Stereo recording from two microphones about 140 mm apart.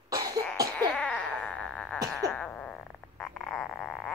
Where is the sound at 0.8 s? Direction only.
10° left (ahead or behind).